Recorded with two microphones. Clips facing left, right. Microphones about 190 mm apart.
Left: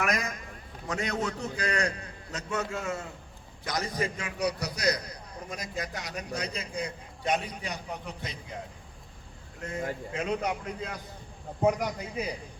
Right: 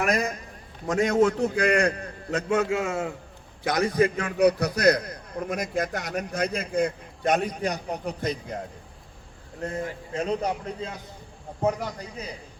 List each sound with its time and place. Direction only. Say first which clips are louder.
0.0 s a man's voice: right 5 dB; 35° right (ahead or behind)
0.9 s a man's voice: right 10 dB; 45° right (ahead or behind)
2.6 s a man's voice: right 8 dB; 85° right
3.6 s a man's voice: right 9 dB; 60° right (ahead or behind); by 8.5 s 45° right (ahead or behind)
9.6 s a man's voice: right 3 dB; 35° right (ahead or behind)
11.6 s speech: even; 10° left (ahead or behind)